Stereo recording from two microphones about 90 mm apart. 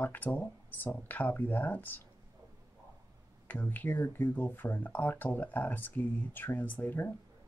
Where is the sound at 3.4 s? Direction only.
20° left (ahead or behind).